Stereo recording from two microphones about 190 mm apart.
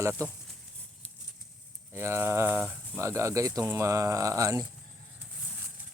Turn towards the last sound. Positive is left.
turn(degrees=-15)  # may be behind; listen again after turning